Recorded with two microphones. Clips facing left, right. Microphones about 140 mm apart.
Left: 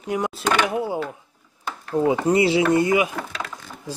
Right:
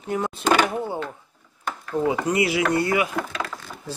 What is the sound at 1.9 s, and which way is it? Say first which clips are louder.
Speech: left 4 dB; 25° left (ahead or behind).